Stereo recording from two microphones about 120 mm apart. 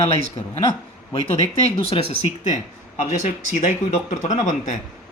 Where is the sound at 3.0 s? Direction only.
75° left (ahead or behind).